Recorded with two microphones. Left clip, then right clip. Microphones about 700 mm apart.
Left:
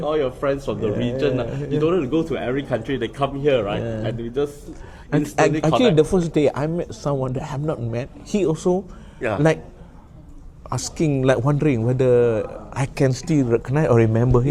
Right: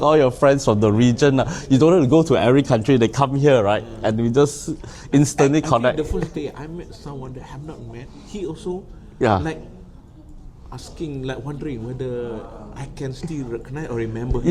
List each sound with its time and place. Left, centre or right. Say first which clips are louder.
0.0 s speech: right 7 dB; right
6.0 s speech: left 8 dB; left
10.7 s speech: left 9 dB; left